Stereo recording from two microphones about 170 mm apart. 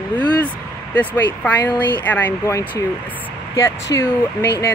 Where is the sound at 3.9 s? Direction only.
20° left (ahead or behind).